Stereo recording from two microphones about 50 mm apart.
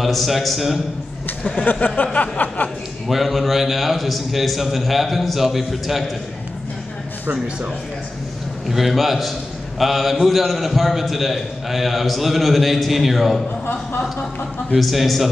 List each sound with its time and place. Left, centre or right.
0.0 s a man's voice: centre
1.5 s speech: left
2.1 s a sound: left
3.1 s a man's voice: centre
8.6 s a man's voice: centre
14.8 s a man's voice: centre